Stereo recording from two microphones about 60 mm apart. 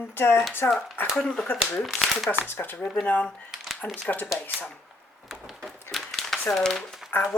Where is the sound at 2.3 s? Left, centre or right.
Left.